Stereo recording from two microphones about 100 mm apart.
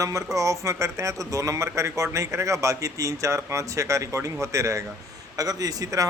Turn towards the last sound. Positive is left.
turn(degrees=-35)  # may be behind; listen again after turning